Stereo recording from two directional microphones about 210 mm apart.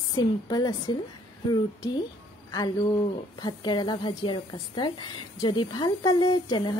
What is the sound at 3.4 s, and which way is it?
A woman's voice, 20° left (ahead or behind).